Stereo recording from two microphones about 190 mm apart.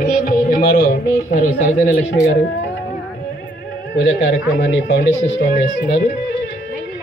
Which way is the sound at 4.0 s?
80° left.